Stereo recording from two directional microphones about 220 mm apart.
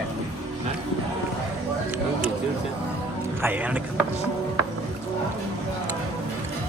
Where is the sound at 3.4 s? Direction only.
10° right (ahead or behind).